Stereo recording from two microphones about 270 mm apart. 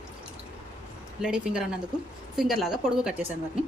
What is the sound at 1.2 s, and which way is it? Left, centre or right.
A woman's voice, centre.